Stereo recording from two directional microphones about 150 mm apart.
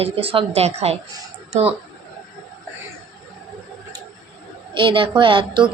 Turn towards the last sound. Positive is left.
turn(degrees=-35)  # may be behind; listen again after turning